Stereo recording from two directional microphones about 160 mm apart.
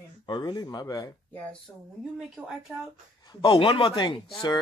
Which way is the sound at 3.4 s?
30° left (ahead or behind).